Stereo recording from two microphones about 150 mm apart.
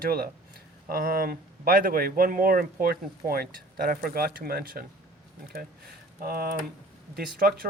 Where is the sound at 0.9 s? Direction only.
80° right.